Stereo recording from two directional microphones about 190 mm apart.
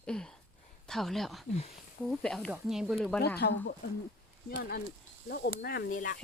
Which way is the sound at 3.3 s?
60° left (ahead or behind).